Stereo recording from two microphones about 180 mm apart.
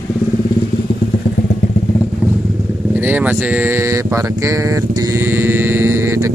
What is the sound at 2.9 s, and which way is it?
Speech, 10° right (ahead or behind).